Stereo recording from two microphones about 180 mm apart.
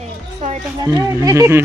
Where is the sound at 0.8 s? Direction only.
15° right (ahead or behind).